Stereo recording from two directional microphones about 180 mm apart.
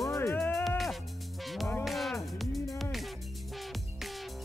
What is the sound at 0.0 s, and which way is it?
Music, 15° left (ahead or behind).